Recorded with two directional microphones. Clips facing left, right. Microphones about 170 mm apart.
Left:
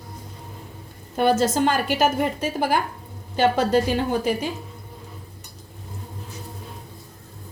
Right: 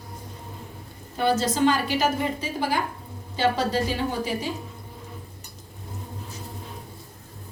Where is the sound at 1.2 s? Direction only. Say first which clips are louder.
Left 3 dB; 50° left (ahead or behind).